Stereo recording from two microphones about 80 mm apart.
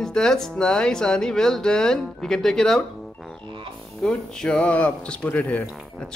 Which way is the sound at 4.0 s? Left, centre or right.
Centre.